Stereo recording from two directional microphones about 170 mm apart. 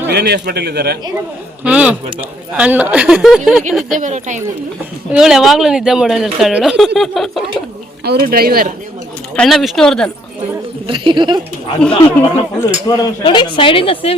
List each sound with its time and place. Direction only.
0.1 s a man's voice: 70° right (ahead or behind)
1.6 s speech: 10° right (ahead or behind)
3.9 s speech: 45° right (ahead or behind)
5.1 s speech: 5° right (ahead or behind)
8.0 s speech: 65° right (ahead or behind)
9.3 s speech: 5° left (ahead or behind)
10.8 s speech: 30° right (ahead or behind)
11.8 s speech: 5° left (ahead or behind)
12.9 s a woman's voice: 20° left (ahead or behind)